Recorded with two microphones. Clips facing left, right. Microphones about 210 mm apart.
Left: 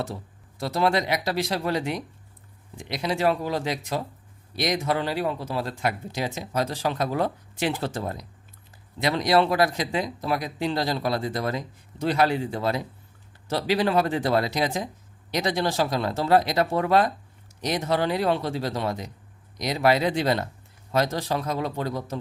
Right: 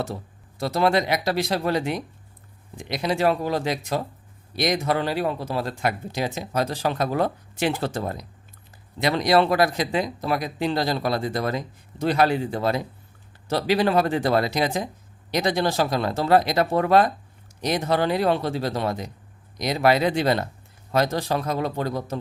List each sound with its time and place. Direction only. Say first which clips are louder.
0.8 s speech: right 2 dB; 50° right (ahead or behind)